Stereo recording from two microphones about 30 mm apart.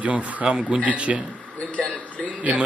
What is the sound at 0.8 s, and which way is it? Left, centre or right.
Speech, right.